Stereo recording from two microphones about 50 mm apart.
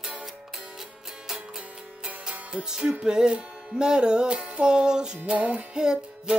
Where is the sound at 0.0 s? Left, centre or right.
Centre.